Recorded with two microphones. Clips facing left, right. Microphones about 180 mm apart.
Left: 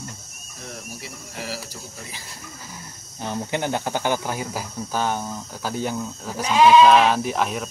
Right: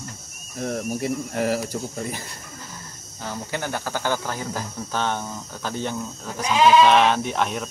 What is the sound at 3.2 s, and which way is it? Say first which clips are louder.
Speech: left 4 dB; 20° left (ahead or behind).